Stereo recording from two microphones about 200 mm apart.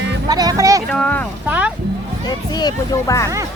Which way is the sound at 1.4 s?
10° right (ahead or behind).